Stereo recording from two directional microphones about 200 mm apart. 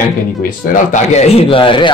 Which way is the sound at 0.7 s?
35° left (ahead or behind).